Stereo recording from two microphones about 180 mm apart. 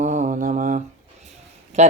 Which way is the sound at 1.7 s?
40° right (ahead or behind).